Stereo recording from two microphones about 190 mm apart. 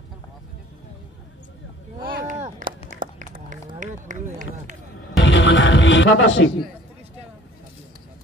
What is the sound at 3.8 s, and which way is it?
Run, 40° right (ahead or behind).